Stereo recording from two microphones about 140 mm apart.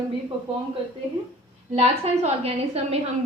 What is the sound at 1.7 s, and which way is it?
A woman's voice, 50° right (ahead or behind).